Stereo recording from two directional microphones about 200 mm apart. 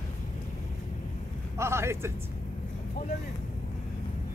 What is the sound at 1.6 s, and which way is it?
Speech, 15° right (ahead or behind).